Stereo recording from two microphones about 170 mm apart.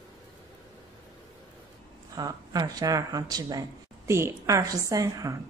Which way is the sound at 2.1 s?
20° right (ahead or behind).